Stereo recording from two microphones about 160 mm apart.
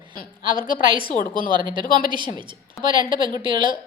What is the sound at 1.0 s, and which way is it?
Speech, 60° left (ahead or behind).